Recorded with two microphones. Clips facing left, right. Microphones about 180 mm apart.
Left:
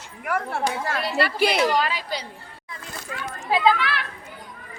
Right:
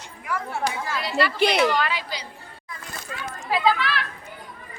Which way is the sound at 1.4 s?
5° left (ahead or behind).